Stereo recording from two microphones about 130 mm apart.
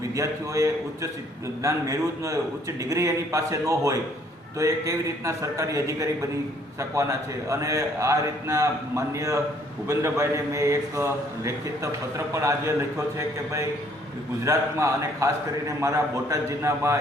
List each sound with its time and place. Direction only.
0.2 s a man's voice: 25° right (ahead or behind)